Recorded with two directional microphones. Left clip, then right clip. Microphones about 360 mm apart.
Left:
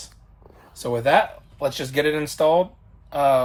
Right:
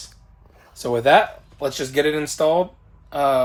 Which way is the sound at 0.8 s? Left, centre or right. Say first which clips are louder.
Right 3 dB; centre.